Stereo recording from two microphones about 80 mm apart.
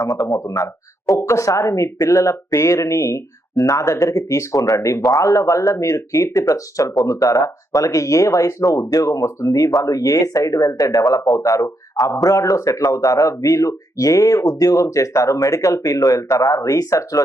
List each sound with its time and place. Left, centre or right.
0.0 s speech: left